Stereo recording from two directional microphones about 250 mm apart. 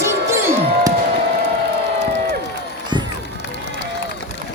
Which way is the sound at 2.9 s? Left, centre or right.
Centre.